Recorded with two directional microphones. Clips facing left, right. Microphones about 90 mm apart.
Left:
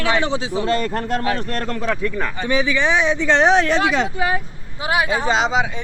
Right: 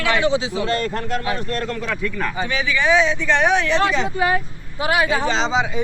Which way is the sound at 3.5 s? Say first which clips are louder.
Left 3 dB; 40° left (ahead or behind).